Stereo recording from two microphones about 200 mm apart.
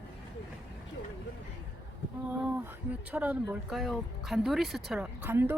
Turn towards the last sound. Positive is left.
turn(degrees=-10)  # may be behind; listen again after turning